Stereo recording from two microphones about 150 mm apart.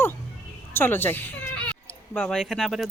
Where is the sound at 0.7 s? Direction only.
15° left (ahead or behind).